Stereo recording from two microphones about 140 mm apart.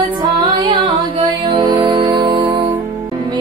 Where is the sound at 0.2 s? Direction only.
35° right (ahead or behind).